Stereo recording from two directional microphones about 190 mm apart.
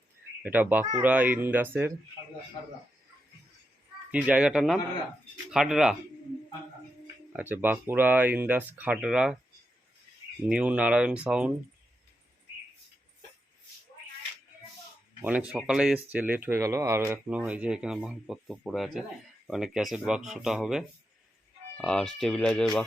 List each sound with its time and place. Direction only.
0.4 s speech: 10° right (ahead or behind)
4.1 s speech: 5° right (ahead or behind)
7.3 s speech: 10° right (ahead or behind)
10.5 s speech: 5° right (ahead or behind)
15.2 s speech: 5° right (ahead or behind)